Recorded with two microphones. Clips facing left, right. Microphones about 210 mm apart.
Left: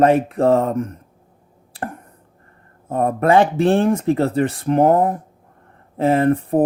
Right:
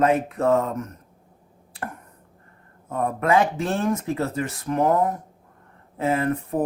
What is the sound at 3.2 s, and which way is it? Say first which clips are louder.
Speech: left 6 dB; 30° left (ahead or behind).